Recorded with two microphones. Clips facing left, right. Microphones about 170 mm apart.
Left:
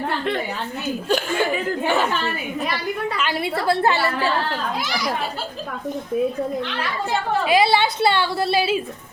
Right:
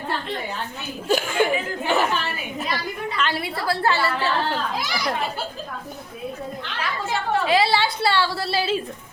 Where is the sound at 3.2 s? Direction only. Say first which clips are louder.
Left 2 dB; 10° left (ahead or behind).